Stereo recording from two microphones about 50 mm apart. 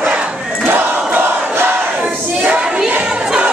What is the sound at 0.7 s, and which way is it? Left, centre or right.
Crowd, right.